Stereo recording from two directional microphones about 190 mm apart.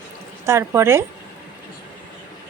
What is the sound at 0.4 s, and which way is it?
Speech, 15° right (ahead or behind).